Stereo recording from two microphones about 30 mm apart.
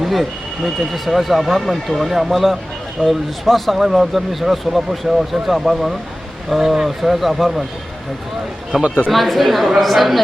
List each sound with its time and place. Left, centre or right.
0.0 s speech: centre
3.0 s speech: left
3.5 s speech: centre
8.7 s speech: centre
9.1 s speech: centre